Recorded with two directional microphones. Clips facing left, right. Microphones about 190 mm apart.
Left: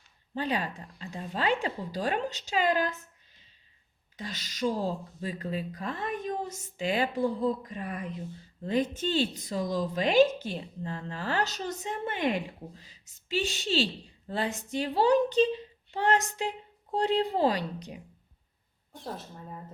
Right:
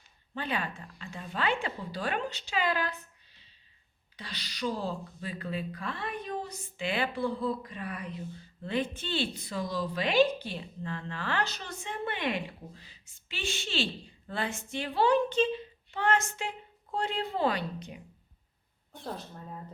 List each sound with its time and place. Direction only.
0.3 s a woman's voice: 35° left (ahead or behind)
4.2 s a woman's voice: 45° left (ahead or behind)
19.0 s speech: centre (ahead or behind)